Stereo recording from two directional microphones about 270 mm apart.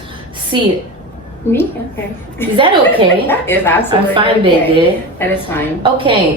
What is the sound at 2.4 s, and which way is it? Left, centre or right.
A woman's voice, centre.